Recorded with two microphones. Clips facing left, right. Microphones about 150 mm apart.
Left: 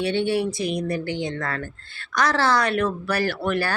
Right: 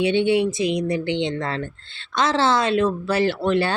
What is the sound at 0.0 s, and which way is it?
Speech, 20° right (ahead or behind).